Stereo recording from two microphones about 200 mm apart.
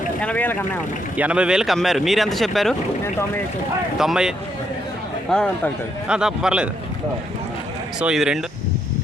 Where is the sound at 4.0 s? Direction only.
5° right (ahead or behind).